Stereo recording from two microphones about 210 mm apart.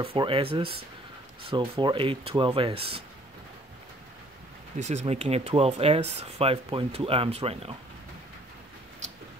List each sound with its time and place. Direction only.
0.0 s speech: 25° right (ahead or behind)
4.7 s speech: 35° right (ahead or behind)